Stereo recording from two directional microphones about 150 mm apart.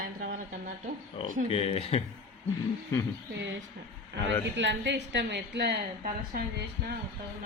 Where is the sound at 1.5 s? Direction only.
40° left (ahead or behind).